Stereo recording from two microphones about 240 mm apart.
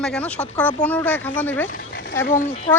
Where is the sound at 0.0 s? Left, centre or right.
Centre.